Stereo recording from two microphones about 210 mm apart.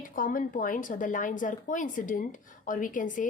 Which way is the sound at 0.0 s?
40° left (ahead or behind).